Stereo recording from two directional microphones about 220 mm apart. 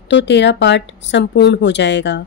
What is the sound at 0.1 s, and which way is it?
Speech, 55° left (ahead or behind).